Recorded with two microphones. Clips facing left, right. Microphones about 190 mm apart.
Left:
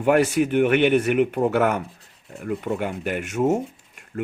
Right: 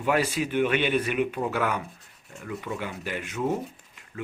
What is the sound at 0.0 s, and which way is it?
Speech, 55° left (ahead or behind).